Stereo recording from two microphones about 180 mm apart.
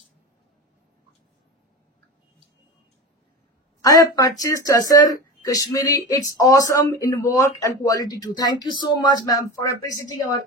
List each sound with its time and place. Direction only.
3.8 s speech: 20° left (ahead or behind)